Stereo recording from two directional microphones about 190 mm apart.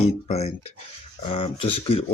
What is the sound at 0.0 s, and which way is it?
Speech, 35° left (ahead or behind).